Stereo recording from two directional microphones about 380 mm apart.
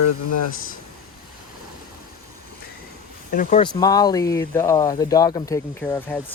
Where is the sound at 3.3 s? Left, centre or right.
Centre.